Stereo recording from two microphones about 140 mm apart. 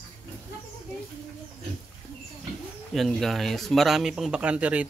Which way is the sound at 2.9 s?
Centre (ahead or behind).